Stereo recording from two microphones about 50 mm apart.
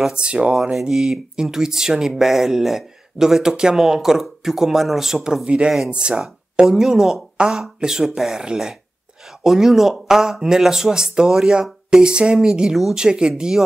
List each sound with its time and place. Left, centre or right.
0.1 s speech: right